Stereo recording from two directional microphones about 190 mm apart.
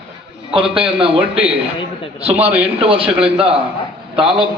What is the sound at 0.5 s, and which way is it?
Speech, 25° right (ahead or behind).